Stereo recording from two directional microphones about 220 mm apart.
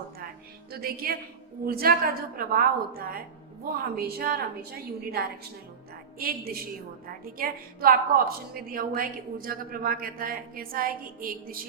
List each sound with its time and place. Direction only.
0.7 s a woman's voice: 45° right (ahead or behind)